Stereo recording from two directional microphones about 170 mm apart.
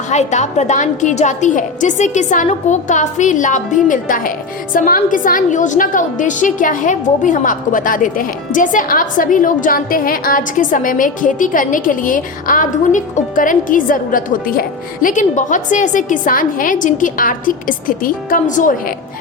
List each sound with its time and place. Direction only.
0.1 s a woman's voice: 45° left (ahead or behind)